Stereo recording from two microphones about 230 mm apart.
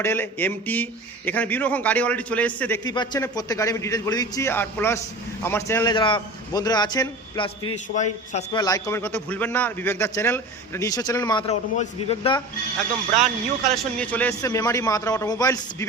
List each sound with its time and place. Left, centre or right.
0.0 s a man's voice: centre
7.9 s a man's voice: left
8.5 s a man's voice: centre
13.7 s a man's voice: centre